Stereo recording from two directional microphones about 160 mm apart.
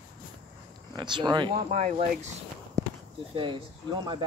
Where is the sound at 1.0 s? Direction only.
30° right (ahead or behind).